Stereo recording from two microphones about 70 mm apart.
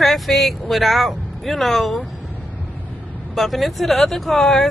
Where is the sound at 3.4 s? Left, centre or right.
Centre.